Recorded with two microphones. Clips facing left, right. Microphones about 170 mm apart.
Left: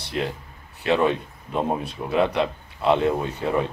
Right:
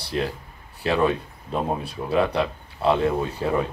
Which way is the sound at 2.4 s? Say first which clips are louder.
Left 1 dB; 25° left (ahead or behind).